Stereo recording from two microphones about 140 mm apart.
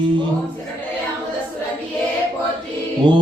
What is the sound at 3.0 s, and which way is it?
Mantra, 35° right (ahead or behind).